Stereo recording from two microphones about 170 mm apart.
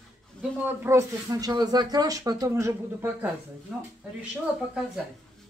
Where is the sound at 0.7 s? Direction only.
15° right (ahead or behind).